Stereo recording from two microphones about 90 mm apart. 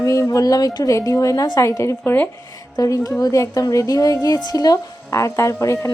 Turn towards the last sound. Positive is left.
turn(degrees=35)  # may be behind; listen again after turning